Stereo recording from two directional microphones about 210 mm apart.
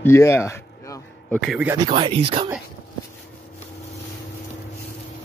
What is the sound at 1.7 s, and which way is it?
Speech, 20° right (ahead or behind).